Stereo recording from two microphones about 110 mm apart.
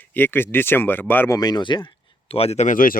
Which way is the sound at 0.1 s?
20° left (ahead or behind).